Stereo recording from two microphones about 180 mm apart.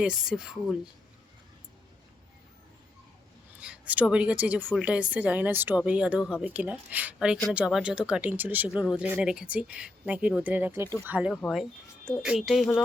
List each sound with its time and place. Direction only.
0.0 s speech: 5° right (ahead or behind)
3.6 s speech: 5° right (ahead or behind)
11.3 s speech: 10° left (ahead or behind)
12.0 s speech: centre (ahead or behind)